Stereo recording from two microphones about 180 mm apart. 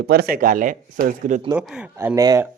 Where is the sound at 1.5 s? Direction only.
5° right (ahead or behind).